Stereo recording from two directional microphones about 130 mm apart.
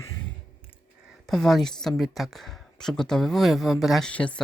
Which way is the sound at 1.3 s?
Centre (ahead or behind).